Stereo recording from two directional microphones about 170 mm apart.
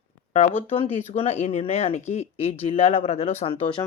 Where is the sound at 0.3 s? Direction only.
40° left (ahead or behind).